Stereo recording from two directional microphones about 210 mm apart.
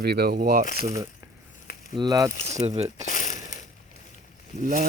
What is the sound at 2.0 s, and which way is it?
Speech, 15° right (ahead or behind).